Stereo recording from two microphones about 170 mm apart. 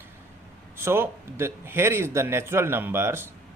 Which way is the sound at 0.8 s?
15° right (ahead or behind).